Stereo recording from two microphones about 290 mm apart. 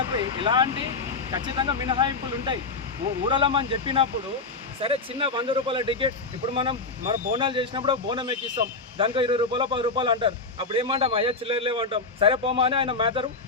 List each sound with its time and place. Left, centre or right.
0.2 s a man's voice: centre